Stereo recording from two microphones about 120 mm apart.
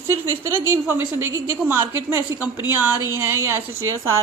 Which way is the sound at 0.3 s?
20° right (ahead or behind).